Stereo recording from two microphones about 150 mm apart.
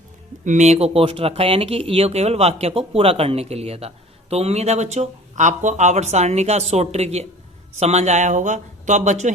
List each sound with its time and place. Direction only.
0.4 s speech: 55° right (ahead or behind)